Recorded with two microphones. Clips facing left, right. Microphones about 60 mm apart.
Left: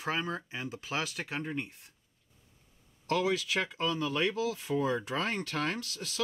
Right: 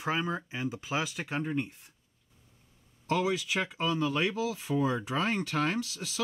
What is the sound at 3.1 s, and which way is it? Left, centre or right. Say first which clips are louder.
Speech: right 1 dB; centre.